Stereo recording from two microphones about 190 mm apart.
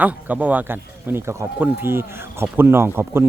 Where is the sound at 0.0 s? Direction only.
10° right (ahead or behind).